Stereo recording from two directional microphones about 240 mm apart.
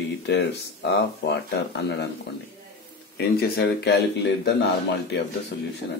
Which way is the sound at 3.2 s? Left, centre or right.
Left.